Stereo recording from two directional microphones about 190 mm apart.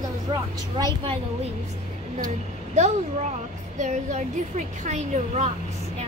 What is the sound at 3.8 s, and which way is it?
A woman's voice, 40° right (ahead or behind).